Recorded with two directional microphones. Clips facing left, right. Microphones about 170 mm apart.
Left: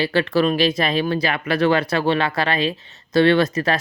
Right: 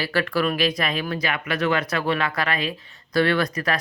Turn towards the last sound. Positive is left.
turn(degrees=25)  # may be behind; listen again after turning